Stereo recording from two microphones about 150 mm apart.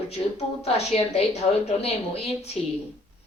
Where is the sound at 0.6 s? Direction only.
40° left (ahead or behind).